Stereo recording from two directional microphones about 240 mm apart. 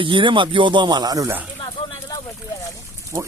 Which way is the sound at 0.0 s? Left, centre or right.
Right.